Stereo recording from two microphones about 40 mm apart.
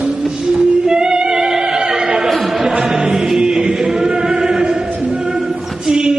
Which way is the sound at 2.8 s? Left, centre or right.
Centre.